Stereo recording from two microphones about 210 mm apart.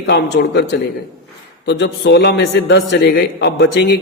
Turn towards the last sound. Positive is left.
turn(degrees=55)  # may be behind; listen again after turning